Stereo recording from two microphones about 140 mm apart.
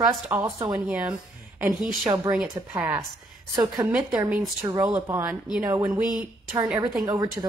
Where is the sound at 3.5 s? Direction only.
30° right (ahead or behind).